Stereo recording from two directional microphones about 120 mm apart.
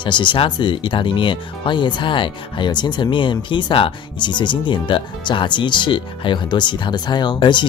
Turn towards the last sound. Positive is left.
turn(degrees=40)  # may be behind; listen again after turning